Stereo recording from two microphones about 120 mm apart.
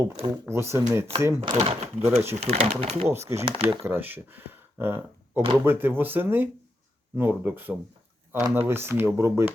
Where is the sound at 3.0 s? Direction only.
20° right (ahead or behind).